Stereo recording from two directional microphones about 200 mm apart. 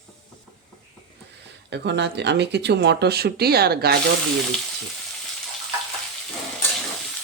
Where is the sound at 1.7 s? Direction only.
60° right (ahead or behind).